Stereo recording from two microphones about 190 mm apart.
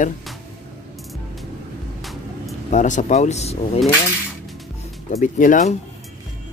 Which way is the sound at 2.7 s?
40° left (ahead or behind).